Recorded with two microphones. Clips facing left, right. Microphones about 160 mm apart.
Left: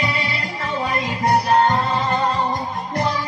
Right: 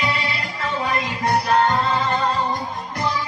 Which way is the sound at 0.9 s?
25° left (ahead or behind).